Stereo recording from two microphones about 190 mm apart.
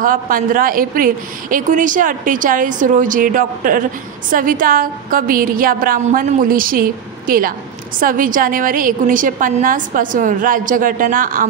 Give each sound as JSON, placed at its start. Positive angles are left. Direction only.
{"t": 0.0, "sound": "a woman's voice", "side_deg": -45}